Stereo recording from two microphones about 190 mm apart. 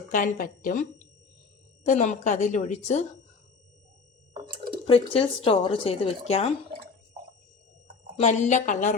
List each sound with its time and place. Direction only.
0.1 s speech: 45° left (ahead or behind)
4.4 s drip: 25° right (ahead or behind)
4.9 s speech: 30° left (ahead or behind)
8.1 s speech: 35° left (ahead or behind)